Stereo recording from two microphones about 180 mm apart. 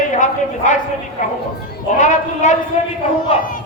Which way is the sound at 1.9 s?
45° left (ahead or behind).